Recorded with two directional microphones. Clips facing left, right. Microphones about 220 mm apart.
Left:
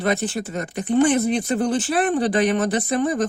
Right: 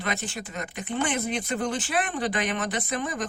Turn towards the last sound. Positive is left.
turn(degrees=35)  # may be behind; listen again after turning